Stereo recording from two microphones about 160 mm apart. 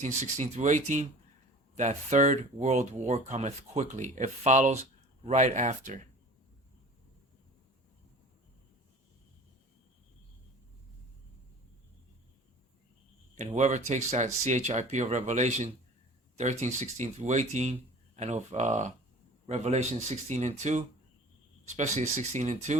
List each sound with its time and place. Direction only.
0.0 s speech: 50° right (ahead or behind)
13.3 s speech: 45° right (ahead or behind)